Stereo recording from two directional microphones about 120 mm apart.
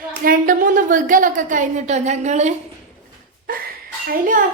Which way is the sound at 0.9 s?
90° right.